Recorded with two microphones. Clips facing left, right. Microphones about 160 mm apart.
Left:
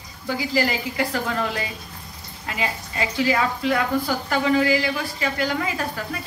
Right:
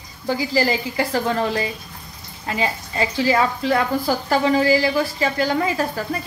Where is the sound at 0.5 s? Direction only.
30° right (ahead or behind).